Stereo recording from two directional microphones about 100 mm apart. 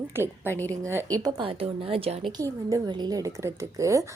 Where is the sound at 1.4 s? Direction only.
65° right (ahead or behind).